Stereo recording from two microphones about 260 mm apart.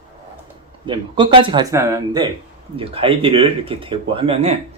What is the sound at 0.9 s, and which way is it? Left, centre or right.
Speech, centre.